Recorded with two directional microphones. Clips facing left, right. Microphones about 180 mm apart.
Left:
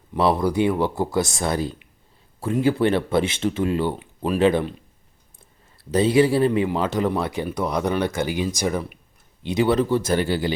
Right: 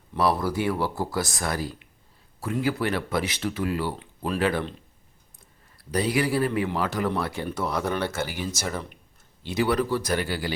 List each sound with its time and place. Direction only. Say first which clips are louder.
0.1 s speech: left 4 dB; 20° left (ahead or behind)
5.7 s speech: left 7 dB; 25° left (ahead or behind)